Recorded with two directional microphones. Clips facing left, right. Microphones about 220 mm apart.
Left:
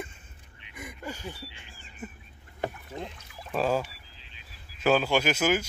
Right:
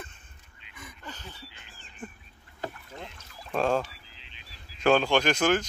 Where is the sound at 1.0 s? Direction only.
10° left (ahead or behind).